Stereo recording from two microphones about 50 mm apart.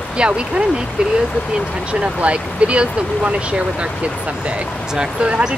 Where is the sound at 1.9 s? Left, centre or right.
Right.